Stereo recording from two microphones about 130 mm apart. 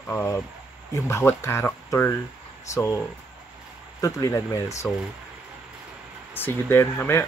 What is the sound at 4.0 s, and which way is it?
Speech, 25° left (ahead or behind).